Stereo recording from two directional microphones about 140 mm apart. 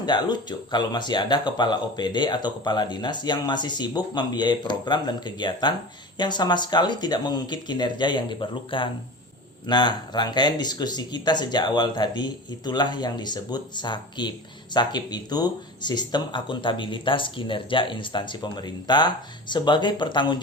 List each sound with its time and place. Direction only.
0.0 s speech: 30° left (ahead or behind)